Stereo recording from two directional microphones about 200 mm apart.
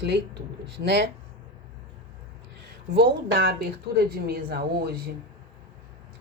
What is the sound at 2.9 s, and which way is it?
Speech, 50° right (ahead or behind).